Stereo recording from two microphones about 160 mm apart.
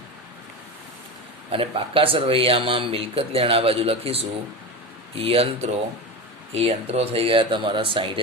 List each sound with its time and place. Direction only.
1.5 s speech: 35° right (ahead or behind)